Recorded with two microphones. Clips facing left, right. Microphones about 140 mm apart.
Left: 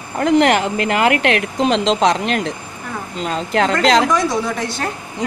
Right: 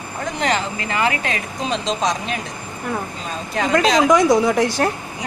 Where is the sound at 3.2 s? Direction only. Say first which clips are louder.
Left 6 dB; 90° left.